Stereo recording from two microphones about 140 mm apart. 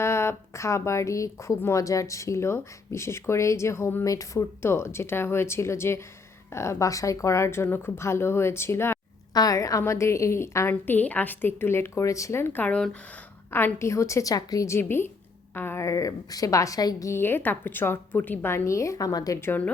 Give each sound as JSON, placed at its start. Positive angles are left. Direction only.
{"t": 0.0, "sound": "a woman's voice", "side_deg": 20}